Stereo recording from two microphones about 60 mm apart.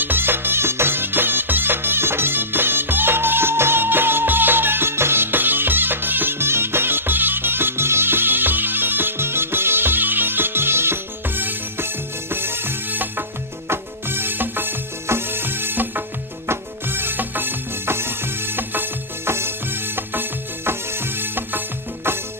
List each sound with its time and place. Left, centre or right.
0.0 s music: right